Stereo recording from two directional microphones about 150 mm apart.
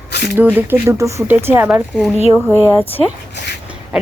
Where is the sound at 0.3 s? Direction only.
15° right (ahead or behind).